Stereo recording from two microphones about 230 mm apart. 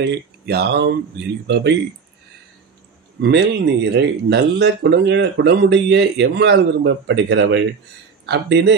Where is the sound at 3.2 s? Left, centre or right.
Right.